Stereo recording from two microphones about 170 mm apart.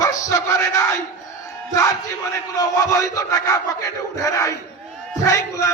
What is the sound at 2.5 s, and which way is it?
A man's voice, 20° left (ahead or behind).